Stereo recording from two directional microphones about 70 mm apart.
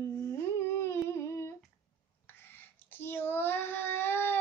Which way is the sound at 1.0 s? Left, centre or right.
Left.